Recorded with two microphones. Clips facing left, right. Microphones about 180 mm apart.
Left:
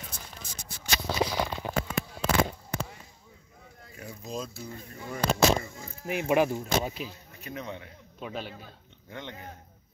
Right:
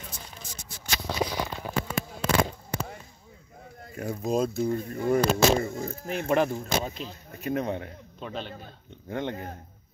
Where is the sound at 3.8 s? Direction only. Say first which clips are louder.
Right 11 dB; 50° right (ahead or behind).